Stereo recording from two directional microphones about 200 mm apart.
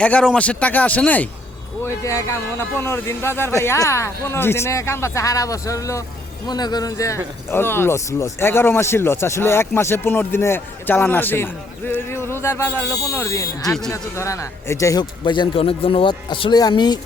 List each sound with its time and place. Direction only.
0.0 s speech: 5° left (ahead or behind); by 17.0 s 20° left (ahead or behind)